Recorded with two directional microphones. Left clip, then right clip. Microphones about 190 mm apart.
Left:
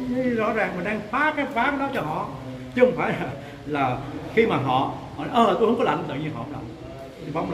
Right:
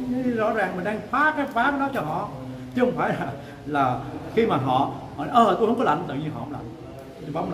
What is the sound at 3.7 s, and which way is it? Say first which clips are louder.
Speech: right 2 dB; 10° right (ahead or behind).